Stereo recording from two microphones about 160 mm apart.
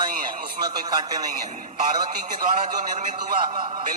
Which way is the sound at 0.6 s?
25° right (ahead or behind).